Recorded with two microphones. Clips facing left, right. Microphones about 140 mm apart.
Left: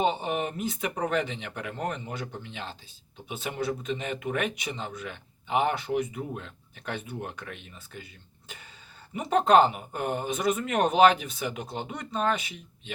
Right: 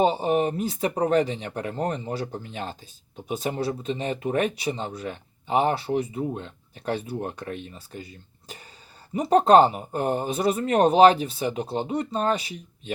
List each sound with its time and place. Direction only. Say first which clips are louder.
0.0 s speech: right 6 dB; 35° right (ahead or behind)